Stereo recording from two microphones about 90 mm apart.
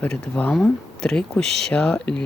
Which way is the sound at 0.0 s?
15° left (ahead or behind).